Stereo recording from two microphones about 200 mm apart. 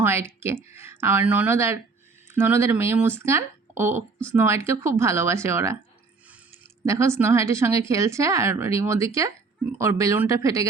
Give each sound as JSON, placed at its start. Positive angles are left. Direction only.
{"t": 0.0, "sound": "speech", "side_deg": -10}
{"t": 6.8, "sound": "speech", "side_deg": -15}